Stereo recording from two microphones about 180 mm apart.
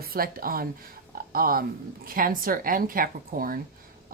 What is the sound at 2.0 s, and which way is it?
A woman's voice, 50° right (ahead or behind).